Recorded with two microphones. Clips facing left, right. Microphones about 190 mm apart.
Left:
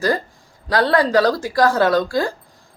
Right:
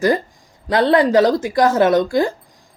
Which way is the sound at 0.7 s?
20° right (ahead or behind).